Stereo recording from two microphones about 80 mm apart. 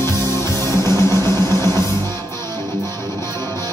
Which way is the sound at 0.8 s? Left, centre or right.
Left.